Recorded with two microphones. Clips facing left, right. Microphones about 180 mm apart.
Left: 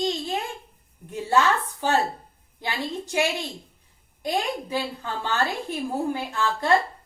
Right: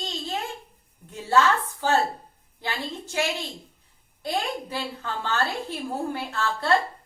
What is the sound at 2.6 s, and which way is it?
A woman's voice, 15° left (ahead or behind).